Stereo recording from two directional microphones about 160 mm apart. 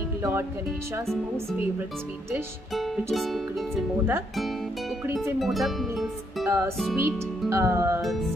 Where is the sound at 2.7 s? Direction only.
Centre (ahead or behind).